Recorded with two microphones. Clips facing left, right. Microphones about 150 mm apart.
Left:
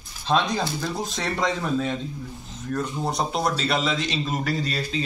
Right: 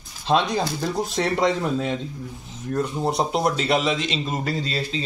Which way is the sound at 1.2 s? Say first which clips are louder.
Right 4 dB; 20° right (ahead or behind).